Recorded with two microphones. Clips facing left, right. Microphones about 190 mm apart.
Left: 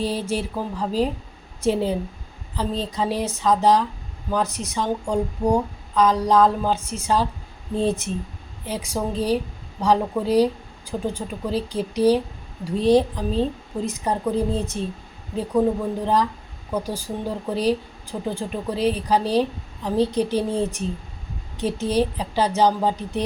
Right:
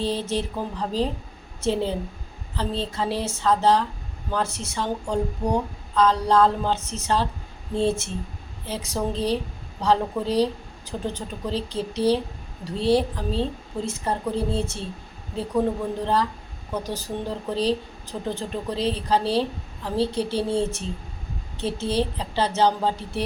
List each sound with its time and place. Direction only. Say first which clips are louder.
0.0 s a woman's voice: left 1 dB; 10° left (ahead or behind)
16.8 s a woman's voice: left 1 dB; 10° left (ahead or behind)